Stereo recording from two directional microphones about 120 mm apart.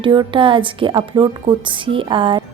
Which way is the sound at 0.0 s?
40° right (ahead or behind).